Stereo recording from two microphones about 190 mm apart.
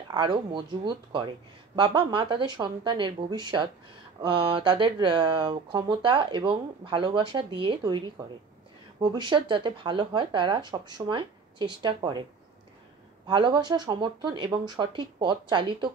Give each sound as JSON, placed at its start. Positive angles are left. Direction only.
{"t": 0.1, "sound": "speech", "side_deg": -25}
{"t": 9.0, "sound": "speech", "side_deg": -25}
{"t": 13.3, "sound": "speech", "side_deg": -25}